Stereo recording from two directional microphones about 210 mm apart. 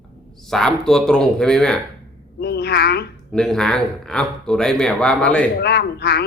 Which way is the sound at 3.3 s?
Centre (ahead or behind).